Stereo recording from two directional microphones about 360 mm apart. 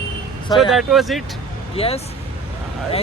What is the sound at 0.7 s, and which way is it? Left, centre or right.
Speech, centre.